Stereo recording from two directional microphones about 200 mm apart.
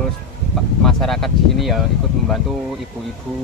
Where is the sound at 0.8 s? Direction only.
Centre (ahead or behind).